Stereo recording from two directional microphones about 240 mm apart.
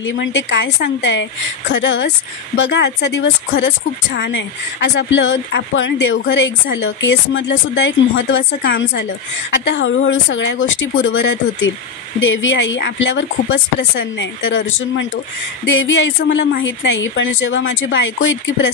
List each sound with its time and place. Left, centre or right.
0.0 s speech: left